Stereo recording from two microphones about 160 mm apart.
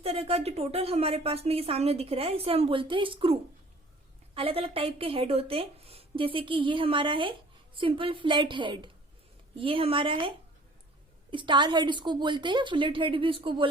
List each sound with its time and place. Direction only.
0.0 s a woman's voice: 40° right (ahead or behind)
4.4 s a woman's voice: 35° right (ahead or behind)